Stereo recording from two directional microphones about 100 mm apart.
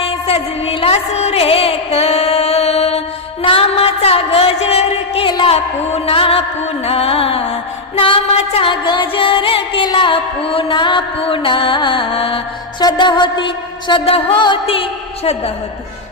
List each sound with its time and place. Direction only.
0.0 s music: 75° left (ahead or behind)
3.4 s a sound: 70° left (ahead or behind)
5.5 s music: 80° left
7.9 s music: 60° left (ahead or behind)
9.8 s music: 50° left (ahead or behind)
11.2 s music: 65° left (ahead or behind)
12.8 s a sound: 50° left (ahead or behind); by 14.3 s 70° left (ahead or behind)
14.3 s music: 55° left (ahead or behind); by 15.5 s 85° left